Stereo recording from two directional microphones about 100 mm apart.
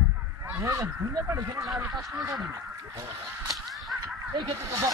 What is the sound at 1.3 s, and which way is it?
Speech, 35° right (ahead or behind).